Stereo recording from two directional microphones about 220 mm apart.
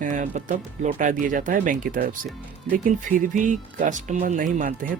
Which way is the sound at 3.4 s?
35° right (ahead or behind).